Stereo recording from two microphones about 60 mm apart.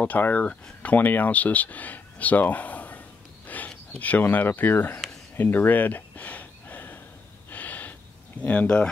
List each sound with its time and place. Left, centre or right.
0.0 s speech: left
5.3 s a sound: left
7.4 s gasp: left
8.4 s speech: left